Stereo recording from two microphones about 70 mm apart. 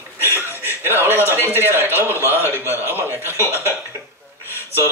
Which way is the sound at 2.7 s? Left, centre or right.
Left.